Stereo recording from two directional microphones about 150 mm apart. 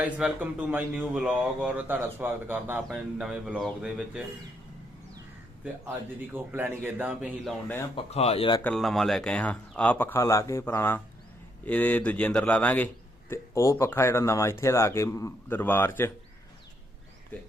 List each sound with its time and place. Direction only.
0.0 s a man's voice: 10° right (ahead or behind)
6.3 s speech: 15° right (ahead or behind)
7.9 s speech: 45° left (ahead or behind)
8.7 s speech: centre (ahead or behind)